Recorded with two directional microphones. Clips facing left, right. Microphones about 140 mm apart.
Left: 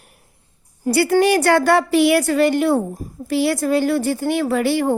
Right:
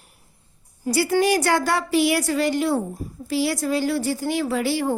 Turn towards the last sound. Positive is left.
turn(degrees=55)  # may be behind; listen again after turning